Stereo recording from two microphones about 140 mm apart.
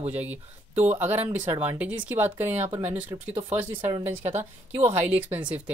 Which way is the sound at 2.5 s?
45° right (ahead or behind).